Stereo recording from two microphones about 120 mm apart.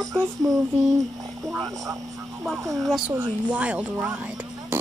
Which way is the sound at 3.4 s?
10° right (ahead or behind).